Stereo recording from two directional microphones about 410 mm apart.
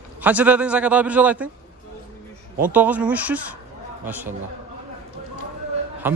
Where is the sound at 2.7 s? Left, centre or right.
Centre.